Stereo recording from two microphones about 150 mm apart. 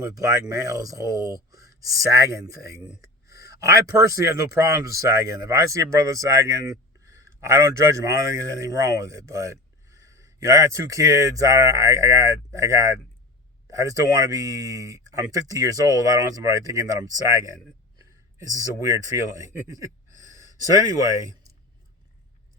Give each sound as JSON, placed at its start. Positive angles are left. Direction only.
{"t": 0.0, "sound": "a man's voice", "side_deg": -25}